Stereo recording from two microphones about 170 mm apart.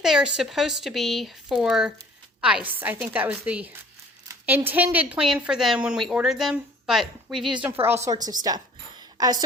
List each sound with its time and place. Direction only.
0.0 s a woman's voice: centre (ahead or behind)
7.9 s a woman's voice: 15° right (ahead or behind)